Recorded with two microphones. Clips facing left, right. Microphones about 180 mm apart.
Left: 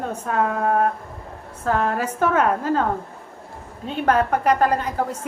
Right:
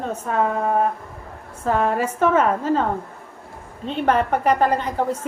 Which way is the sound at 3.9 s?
5° left (ahead or behind).